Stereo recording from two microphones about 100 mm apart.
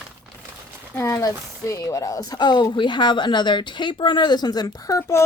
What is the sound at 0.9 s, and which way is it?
Speech, 30° left (ahead or behind).